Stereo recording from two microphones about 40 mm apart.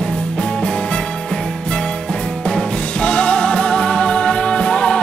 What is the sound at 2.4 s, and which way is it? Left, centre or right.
Music, left.